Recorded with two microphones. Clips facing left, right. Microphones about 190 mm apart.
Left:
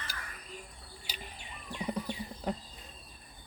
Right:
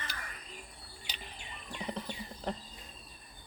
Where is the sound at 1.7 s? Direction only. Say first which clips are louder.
Left 4 dB; 10° left (ahead or behind).